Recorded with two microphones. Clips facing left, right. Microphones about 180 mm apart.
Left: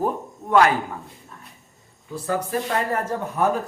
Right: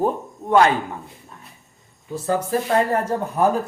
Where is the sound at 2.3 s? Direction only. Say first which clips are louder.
Right 4 dB; 30° right (ahead or behind).